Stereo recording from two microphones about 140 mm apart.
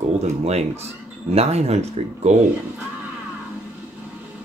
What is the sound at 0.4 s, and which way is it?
Speech, 50° right (ahead or behind).